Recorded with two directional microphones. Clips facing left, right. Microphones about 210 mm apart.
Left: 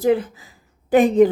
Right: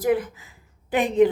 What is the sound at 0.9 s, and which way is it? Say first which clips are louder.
Speech: left 5 dB; 40° left (ahead or behind).